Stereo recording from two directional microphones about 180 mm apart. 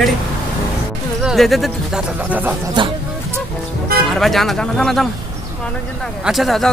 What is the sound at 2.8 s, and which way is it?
Speech, 25° right (ahead or behind).